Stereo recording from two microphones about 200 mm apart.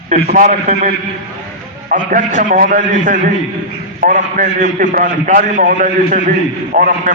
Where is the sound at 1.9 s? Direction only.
40° right (ahead or behind).